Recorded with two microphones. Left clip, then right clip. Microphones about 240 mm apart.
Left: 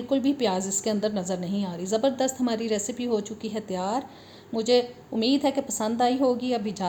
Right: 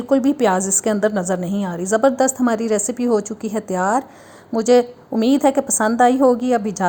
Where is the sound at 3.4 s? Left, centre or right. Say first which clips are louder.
Right 8 dB; right.